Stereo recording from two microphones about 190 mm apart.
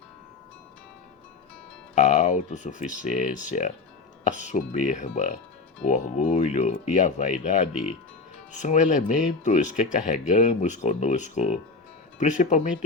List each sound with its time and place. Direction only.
2.0 s speech: 40° left (ahead or behind)
7.7 s speech: 5° right (ahead or behind)
8.5 s speech: 40° left (ahead or behind)